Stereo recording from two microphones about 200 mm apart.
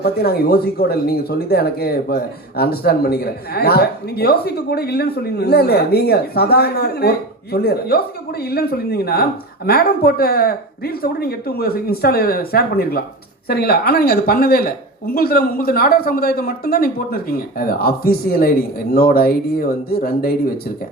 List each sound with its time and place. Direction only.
0.0 s speech: 50° left (ahead or behind)